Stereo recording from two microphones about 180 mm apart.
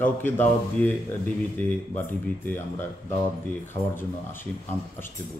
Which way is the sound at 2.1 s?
10° left (ahead or behind).